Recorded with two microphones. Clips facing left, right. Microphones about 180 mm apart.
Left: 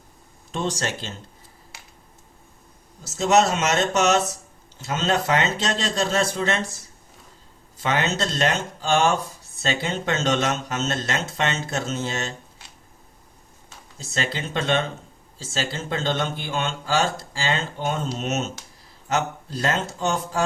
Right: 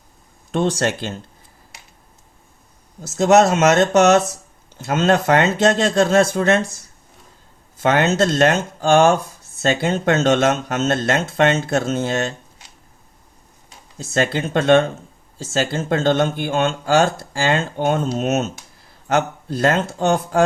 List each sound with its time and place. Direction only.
0.5 s speech: 60° right (ahead or behind)
3.0 s speech: 55° right (ahead or behind)
7.8 s speech: 50° right (ahead or behind)
14.0 s speech: 50° right (ahead or behind)